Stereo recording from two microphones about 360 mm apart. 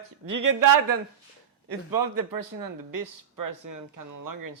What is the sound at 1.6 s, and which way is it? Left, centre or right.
Speech, right.